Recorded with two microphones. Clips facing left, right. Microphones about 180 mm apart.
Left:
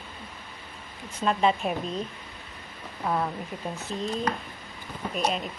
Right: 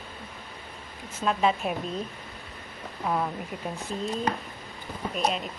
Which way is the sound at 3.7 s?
10° right (ahead or behind).